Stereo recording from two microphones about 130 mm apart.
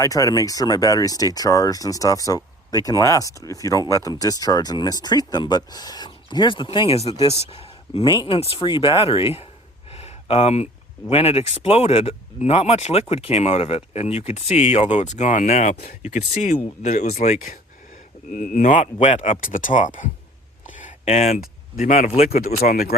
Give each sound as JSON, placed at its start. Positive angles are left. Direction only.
{"t": 0.0, "sound": "speech", "side_deg": 25}
{"t": 9.9, "sound": "a sound", "side_deg": 55}
{"t": 11.1, "sound": "speech", "side_deg": 50}
{"t": 18.3, "sound": "speech", "side_deg": 90}
{"t": 19.4, "sound": "speech", "side_deg": 90}
{"t": 21.0, "sound": "speech", "side_deg": 50}
{"t": 21.3, "sound": "speech", "side_deg": 90}